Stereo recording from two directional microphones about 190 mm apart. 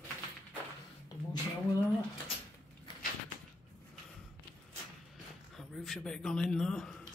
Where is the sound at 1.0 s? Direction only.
20° left (ahead or behind).